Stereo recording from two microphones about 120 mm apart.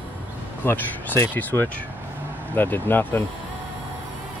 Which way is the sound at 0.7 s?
20° left (ahead or behind).